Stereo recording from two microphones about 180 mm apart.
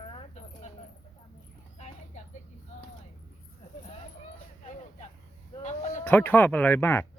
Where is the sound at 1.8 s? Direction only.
40° left (ahead or behind).